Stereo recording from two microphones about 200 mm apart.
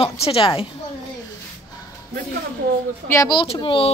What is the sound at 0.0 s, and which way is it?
Speech, 30° left (ahead or behind).